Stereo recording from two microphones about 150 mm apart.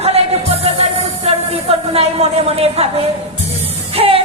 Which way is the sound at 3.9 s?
40° right (ahead or behind).